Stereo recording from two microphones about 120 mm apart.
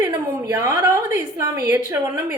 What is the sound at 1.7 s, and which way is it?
Speech, 15° right (ahead or behind).